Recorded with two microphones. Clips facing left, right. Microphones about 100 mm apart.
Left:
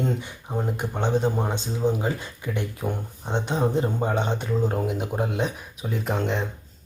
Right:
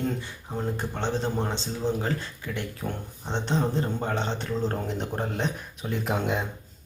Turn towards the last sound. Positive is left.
turn(degrees=-5)  # may be behind; listen again after turning